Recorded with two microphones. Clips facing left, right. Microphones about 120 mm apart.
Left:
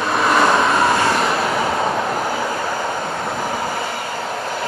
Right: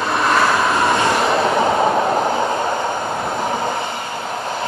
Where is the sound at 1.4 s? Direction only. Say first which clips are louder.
Right 4 dB; 25° right (ahead or behind).